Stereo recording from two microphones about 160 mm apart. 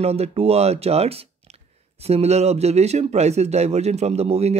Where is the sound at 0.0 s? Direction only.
40° right (ahead or behind).